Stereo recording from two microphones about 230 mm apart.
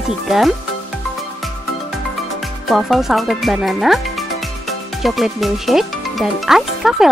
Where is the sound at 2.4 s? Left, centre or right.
Centre.